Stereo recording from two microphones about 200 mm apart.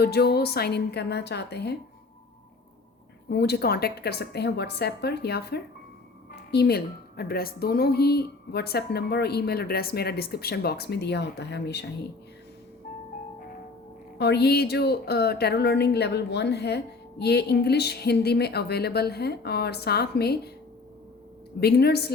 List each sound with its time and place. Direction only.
0.0 s a woman's voice: 55° left (ahead or behind)
3.2 s a woman's voice: 55° left (ahead or behind)
14.2 s a woman's voice: 55° left (ahead or behind)
21.6 s a woman's voice: 55° left (ahead or behind)